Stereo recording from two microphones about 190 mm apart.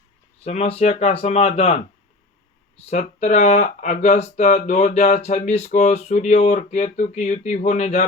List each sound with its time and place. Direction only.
0.4 s speech: 35° left (ahead or behind)
2.9 s speech: 35° left (ahead or behind)